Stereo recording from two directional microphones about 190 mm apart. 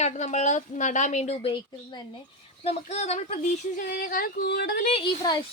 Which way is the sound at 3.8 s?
45° left (ahead or behind).